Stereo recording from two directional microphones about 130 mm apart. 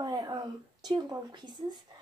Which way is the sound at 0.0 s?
30° right (ahead or behind).